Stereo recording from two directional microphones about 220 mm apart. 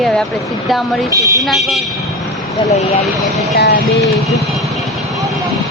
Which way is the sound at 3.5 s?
45° left (ahead or behind).